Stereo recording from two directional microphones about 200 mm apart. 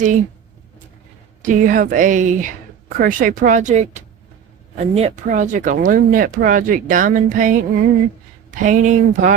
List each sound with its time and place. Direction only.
1.4 s speech: 40° right (ahead or behind)